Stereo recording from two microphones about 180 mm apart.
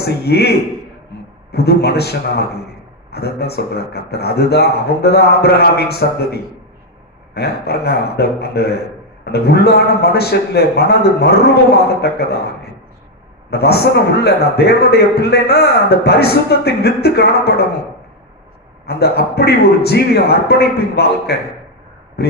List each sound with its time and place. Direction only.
0.0 s a man's voice: 60° left (ahead or behind)
1.5 s a man's voice: 65° left (ahead or behind)
18.9 s a man's voice: 65° left (ahead or behind)